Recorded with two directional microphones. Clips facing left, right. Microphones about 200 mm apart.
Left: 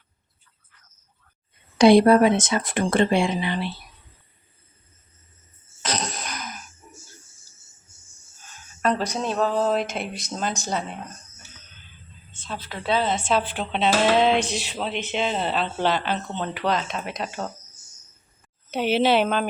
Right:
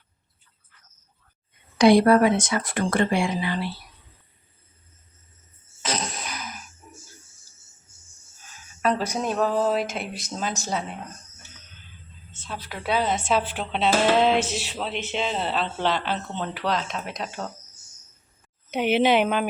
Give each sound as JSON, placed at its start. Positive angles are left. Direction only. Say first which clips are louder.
{"t": 1.8, "sound": "speech", "louder": "left 2 dB", "side_deg": 25}
{"t": 5.8, "sound": "a sound", "louder": "left 1 dB", "side_deg": -5}
{"t": 8.8, "sound": "speech", "louder": "even", "side_deg": -5}
{"t": 12.3, "sound": "a sound", "louder": "left 2 dB", "side_deg": -5}
{"t": 12.6, "sound": "speech", "louder": "left 1 dB", "side_deg": -10}
{"t": 18.7, "sound": "a woman's voice", "louder": "even", "side_deg": -15}